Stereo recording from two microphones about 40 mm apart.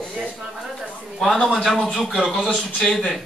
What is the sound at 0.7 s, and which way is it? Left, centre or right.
A man's voice, centre.